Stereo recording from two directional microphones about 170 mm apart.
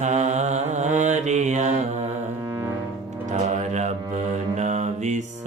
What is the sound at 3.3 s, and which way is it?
Mantra, 45° right (ahead or behind).